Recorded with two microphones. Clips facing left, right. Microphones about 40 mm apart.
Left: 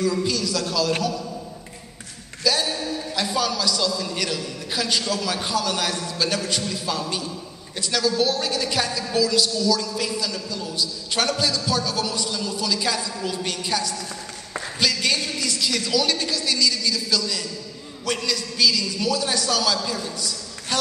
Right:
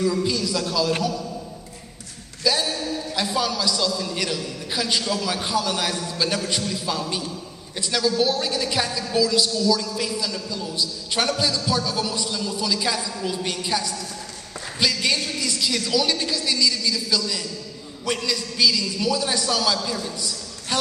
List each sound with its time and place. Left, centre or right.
0.3 s a man's voice: centre
2.4 s a man's voice: centre